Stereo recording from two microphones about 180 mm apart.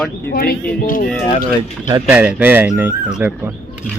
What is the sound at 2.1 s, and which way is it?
Speech, 5° right (ahead or behind).